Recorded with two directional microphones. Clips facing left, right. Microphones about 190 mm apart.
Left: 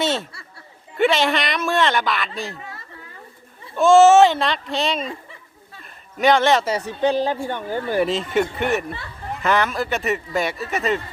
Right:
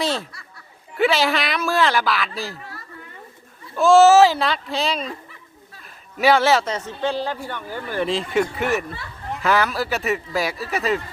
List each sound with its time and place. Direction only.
0.0 s snicker: centre (ahead or behind)
0.9 s speech: centre (ahead or behind)
3.8 s speech: centre (ahead or behind)
5.8 s a sound: 5° right (ahead or behind)
6.7 s speech: 15° left (ahead or behind)
8.0 s speech: centre (ahead or behind)